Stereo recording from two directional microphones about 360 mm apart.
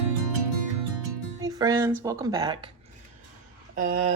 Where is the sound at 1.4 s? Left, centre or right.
Centre.